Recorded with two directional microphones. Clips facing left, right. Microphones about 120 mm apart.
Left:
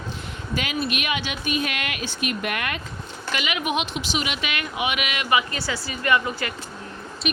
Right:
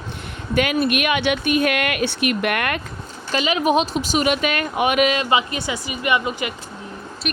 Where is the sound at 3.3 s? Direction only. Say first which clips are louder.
Right 8 dB; 35° right (ahead or behind).